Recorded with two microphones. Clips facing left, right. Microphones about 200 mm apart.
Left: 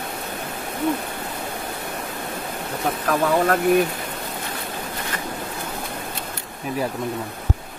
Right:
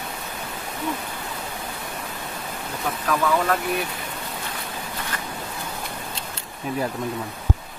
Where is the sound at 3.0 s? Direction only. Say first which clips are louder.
Left 2 dB; 45° left (ahead or behind).